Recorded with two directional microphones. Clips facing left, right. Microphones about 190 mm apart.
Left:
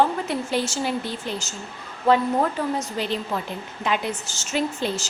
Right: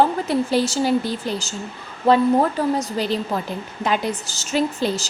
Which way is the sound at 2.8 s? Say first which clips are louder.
Right 4 dB; 35° right (ahead or behind).